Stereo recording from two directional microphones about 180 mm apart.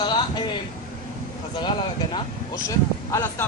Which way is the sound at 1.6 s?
25° left (ahead or behind).